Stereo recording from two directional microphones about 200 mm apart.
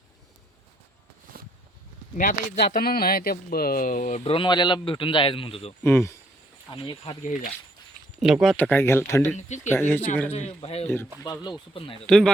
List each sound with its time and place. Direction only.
1.3 s a sound: 50° right (ahead or behind)
2.1 s speech: 45° left (ahead or behind); by 5.7 s 30° left (ahead or behind)
5.8 s speech: 10° left (ahead or behind)
6.7 s speech: 25° left (ahead or behind)
8.2 s speech: centre (ahead or behind)
10.3 s speech: 30° left (ahead or behind)
10.8 s speech: 10° left (ahead or behind)
12.0 s speech: 5° left (ahead or behind)